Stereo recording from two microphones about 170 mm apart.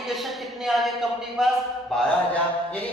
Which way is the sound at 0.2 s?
Centre (ahead or behind).